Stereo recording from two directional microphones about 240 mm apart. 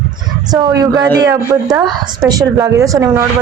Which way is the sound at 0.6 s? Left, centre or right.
Centre.